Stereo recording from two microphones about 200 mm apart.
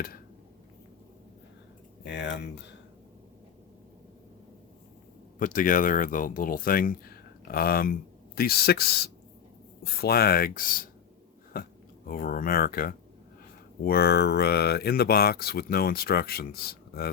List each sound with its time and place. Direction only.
2.0 s speech: 60° left (ahead or behind)
5.4 s speech: 45° left (ahead or behind)